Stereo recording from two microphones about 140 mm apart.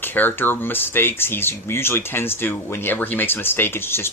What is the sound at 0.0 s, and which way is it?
Speech, 15° left (ahead or behind).